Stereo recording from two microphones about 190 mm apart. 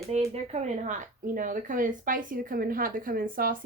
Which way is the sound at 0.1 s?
35° right (ahead or behind).